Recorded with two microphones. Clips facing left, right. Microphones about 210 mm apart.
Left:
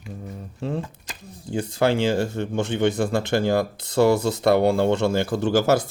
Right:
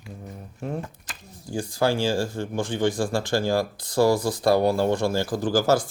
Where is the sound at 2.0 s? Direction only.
65° left (ahead or behind).